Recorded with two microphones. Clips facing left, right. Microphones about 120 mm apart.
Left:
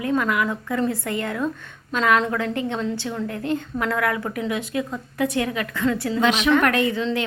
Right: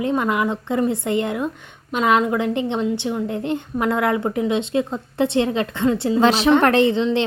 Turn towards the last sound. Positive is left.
turn(degrees=-25)  # may be behind; listen again after turning